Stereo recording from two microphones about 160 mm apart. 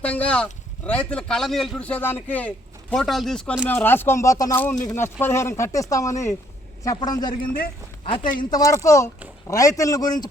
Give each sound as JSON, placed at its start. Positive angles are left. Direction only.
{"t": 0.0, "sound": "a man's voice", "side_deg": 10}